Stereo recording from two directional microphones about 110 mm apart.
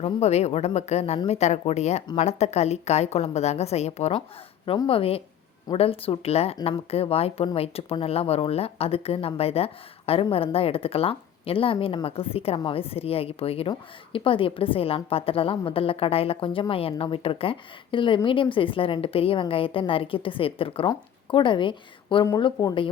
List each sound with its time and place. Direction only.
0.0 s a woman's voice: 80° left
4.9 s a woman's voice: 60° left (ahead or behind)